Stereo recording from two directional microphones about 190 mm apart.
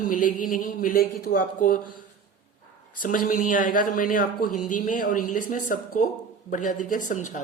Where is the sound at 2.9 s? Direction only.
45° left (ahead or behind).